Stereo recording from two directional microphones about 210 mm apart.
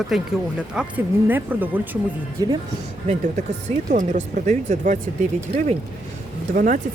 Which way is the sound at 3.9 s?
35° right (ahead or behind).